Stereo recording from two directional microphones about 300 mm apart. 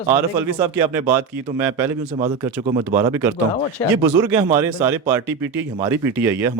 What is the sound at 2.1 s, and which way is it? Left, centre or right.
Speech, centre.